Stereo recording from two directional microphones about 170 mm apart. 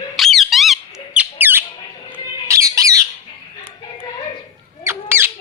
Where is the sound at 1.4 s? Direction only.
10° right (ahead or behind).